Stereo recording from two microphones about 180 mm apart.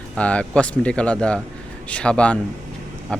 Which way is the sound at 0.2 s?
5° left (ahead or behind).